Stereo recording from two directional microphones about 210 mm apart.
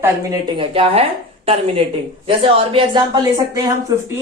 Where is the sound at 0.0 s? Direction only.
20° right (ahead or behind).